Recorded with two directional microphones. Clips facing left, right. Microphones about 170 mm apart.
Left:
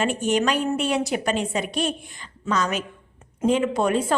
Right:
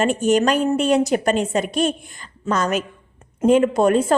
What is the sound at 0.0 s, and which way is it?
A woman's voice, 45° right (ahead or behind).